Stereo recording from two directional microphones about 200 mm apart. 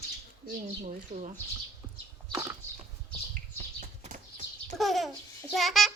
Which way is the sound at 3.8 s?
40° right (ahead or behind).